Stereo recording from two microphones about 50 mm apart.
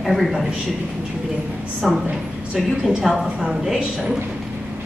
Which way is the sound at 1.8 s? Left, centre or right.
Centre.